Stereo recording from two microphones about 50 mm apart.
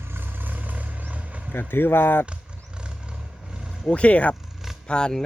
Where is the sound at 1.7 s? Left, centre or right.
Left.